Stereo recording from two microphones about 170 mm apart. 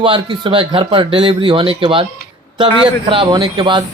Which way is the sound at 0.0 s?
30° right (ahead or behind).